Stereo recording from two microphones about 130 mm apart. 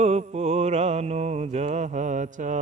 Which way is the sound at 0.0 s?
55° right (ahead or behind).